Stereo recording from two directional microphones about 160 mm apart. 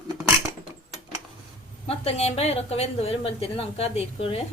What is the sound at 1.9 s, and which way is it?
A woman's voice, 40° left (ahead or behind).